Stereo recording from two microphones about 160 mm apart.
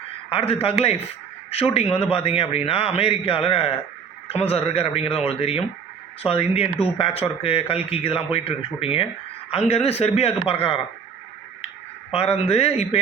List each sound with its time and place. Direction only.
0.3 s a man's voice: 35° left (ahead or behind)
12.1 s a man's voice: 35° left (ahead or behind)